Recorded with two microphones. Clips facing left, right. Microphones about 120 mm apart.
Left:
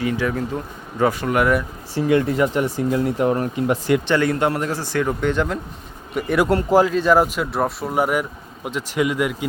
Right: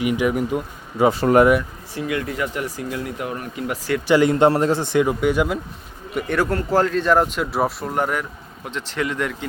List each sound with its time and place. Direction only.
0.0 s speech: 15° right (ahead or behind)
1.1 s speech: 35° right (ahead or behind)
2.0 s speech: 30° left (ahead or behind)
3.5 s speech: 20° left (ahead or behind)
4.0 s speech: 20° right (ahead or behind)
5.0 s speech: 10° right (ahead or behind)
6.1 s speech: 5° left (ahead or behind)
6.5 s speech: 15° left (ahead or behind)